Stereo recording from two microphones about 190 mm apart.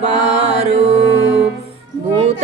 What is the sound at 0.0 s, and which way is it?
Mantra, 35° right (ahead or behind).